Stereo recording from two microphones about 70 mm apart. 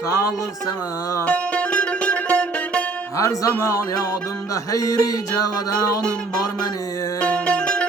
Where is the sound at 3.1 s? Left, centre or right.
Left.